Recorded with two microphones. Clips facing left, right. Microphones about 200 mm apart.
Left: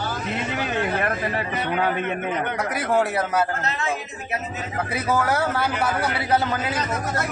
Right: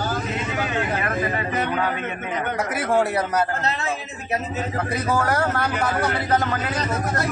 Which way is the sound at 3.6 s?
35° right (ahead or behind).